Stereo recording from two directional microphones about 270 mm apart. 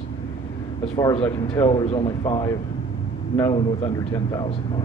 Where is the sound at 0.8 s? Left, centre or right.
Centre.